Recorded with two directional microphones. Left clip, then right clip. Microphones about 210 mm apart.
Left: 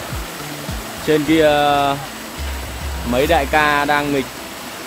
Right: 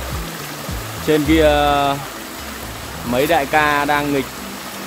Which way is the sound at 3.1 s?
Centre (ahead or behind).